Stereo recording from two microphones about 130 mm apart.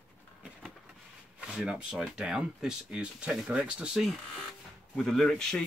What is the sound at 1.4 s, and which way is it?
Speech, 5° right (ahead or behind).